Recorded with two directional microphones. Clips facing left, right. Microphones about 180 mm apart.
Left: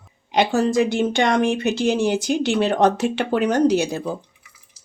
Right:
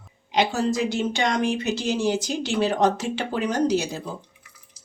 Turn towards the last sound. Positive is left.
turn(degrees=60)  # may be behind; listen again after turning